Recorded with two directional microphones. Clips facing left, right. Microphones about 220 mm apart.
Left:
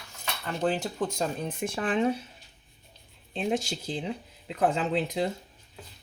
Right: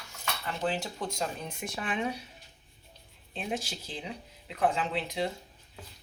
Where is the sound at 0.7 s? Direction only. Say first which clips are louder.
Left 5 dB; 50° left (ahead or behind).